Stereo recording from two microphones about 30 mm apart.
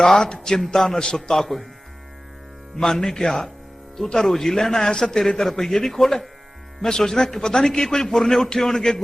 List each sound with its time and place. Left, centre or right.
0.0 s a man's voice: centre
2.7 s a man's voice: centre
8.1 s a man's voice: centre